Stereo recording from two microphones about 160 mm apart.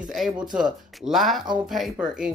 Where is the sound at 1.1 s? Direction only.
Centre (ahead or behind).